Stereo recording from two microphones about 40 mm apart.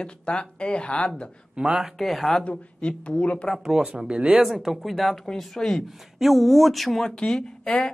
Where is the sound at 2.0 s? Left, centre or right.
Centre.